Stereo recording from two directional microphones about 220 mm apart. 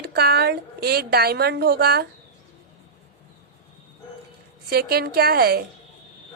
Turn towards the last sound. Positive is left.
turn(degrees=-45)  # may be behind; listen again after turning